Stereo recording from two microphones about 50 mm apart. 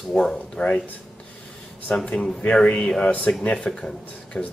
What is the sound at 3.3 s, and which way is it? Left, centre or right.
Speech, left.